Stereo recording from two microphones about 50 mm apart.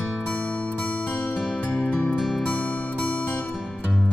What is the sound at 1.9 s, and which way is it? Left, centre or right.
Music, left.